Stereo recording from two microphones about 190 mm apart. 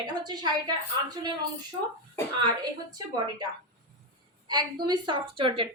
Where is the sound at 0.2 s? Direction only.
20° right (ahead or behind).